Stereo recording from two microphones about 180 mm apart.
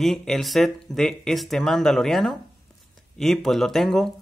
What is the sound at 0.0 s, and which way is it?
Speech, centre (ahead or behind).